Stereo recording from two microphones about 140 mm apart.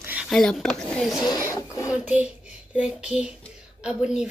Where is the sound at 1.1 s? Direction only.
25° left (ahead or behind).